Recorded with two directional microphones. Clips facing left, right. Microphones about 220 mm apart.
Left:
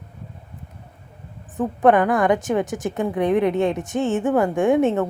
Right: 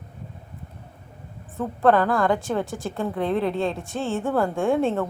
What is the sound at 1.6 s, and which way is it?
Speech, 15° left (ahead or behind).